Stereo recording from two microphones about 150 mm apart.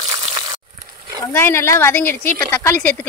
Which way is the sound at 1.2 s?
15° left (ahead or behind).